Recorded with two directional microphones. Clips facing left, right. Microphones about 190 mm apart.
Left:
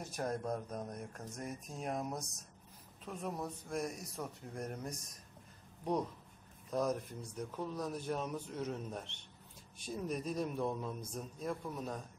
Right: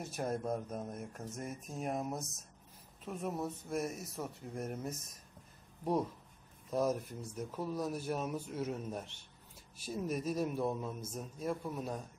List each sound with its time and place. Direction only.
0.0 s speech: 5° right (ahead or behind)
6.7 s speech: 5° right (ahead or behind)